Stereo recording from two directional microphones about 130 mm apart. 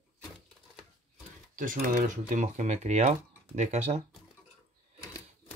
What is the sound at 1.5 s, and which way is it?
Speech, 90° right.